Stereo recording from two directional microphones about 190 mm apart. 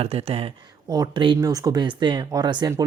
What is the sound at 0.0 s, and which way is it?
Speech, 30° right (ahead or behind).